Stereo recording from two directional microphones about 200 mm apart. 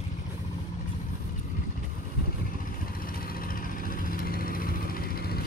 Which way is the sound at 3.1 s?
45° left (ahead or behind).